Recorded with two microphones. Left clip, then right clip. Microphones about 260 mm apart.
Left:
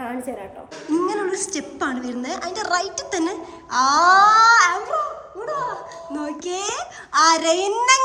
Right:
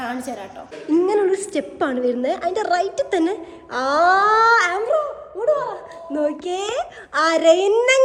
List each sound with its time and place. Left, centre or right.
0.9 s a woman's voice: centre
6.1 s a woman's voice: centre